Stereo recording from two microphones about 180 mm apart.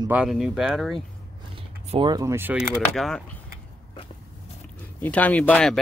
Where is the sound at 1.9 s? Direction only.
25° right (ahead or behind).